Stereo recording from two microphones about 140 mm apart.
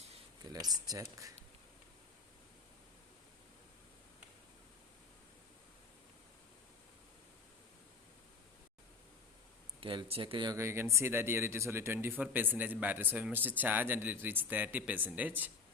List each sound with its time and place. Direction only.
0.5 s speech: 30° right (ahead or behind)
9.8 s speech: 40° right (ahead or behind)
10.6 s speech: 20° right (ahead or behind)